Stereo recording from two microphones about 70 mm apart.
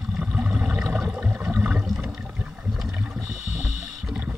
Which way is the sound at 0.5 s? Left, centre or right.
Centre.